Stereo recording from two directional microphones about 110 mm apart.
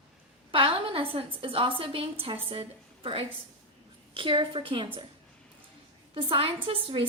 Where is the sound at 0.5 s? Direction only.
55° right (ahead or behind).